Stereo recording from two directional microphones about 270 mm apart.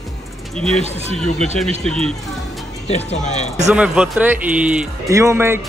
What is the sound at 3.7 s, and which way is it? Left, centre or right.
Speech, centre.